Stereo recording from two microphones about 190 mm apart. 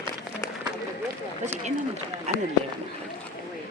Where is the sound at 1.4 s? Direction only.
35° right (ahead or behind).